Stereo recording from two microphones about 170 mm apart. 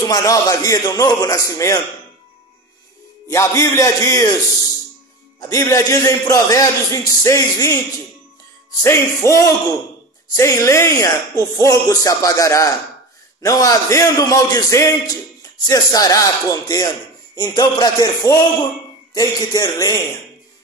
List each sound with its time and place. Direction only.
0.0 s speech: 20° left (ahead or behind)
3.3 s a man's voice: 20° left (ahead or behind)
5.5 s speech: 20° left (ahead or behind)
8.8 s a man's voice: 15° left (ahead or behind)